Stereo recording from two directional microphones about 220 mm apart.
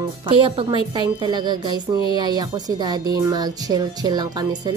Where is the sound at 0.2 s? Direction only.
25° right (ahead or behind).